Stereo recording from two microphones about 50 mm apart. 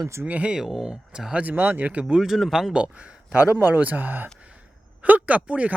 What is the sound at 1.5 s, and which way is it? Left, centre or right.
Speech, right.